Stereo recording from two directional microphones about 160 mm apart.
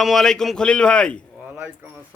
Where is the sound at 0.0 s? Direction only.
Centre (ahead or behind).